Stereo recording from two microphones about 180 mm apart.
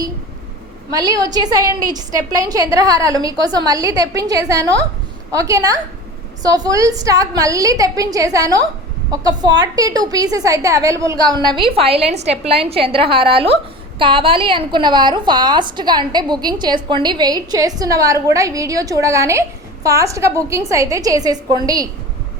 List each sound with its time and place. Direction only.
0.9 s a woman's voice: 20° right (ahead or behind)